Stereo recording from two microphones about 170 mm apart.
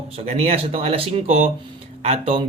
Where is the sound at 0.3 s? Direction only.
35° right (ahead or behind).